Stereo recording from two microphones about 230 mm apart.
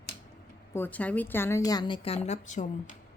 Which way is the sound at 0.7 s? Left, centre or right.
Centre.